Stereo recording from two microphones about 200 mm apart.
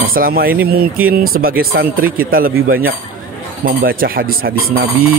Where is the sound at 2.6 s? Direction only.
90° right.